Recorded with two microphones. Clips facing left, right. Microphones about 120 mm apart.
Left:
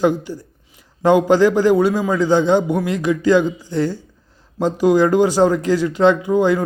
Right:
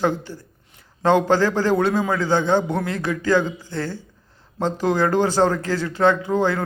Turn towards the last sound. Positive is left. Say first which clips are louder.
# left 5 dB
turn(degrees=15)  # may be behind; listen again after turning